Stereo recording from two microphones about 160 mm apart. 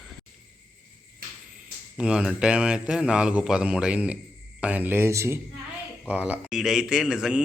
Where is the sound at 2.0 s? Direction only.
5° right (ahead or behind).